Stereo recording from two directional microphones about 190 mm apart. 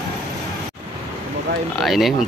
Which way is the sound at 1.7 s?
Centre (ahead or behind).